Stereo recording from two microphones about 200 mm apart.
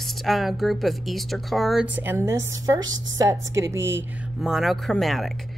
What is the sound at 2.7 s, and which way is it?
Speech, 70° right (ahead or behind).